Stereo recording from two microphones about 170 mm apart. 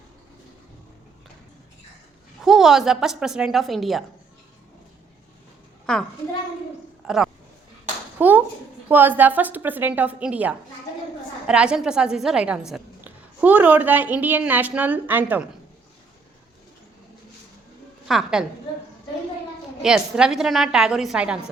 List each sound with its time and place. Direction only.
2.4 s a woman's voice: centre (ahead or behind)
5.8 s a child's voice: 5° left (ahead or behind)
8.2 s a woman's voice: 10° right (ahead or behind)
18.1 s a woman's voice: 5° right (ahead or behind)
19.8 s a woman's voice: 5° right (ahead or behind)